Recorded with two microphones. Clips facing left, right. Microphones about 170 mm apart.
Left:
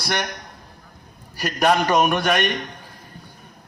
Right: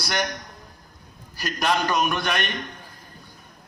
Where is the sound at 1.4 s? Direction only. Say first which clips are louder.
Left 5 dB; 45° left (ahead or behind).